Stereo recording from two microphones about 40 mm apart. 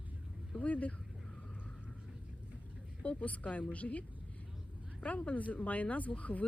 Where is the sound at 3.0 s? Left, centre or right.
Left.